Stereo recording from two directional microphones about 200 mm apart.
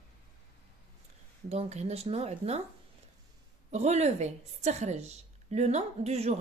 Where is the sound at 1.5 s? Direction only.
30° right (ahead or behind).